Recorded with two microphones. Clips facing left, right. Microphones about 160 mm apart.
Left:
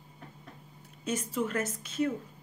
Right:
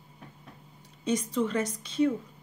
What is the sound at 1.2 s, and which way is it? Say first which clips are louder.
Speech: right 3 dB; 5° left (ahead or behind).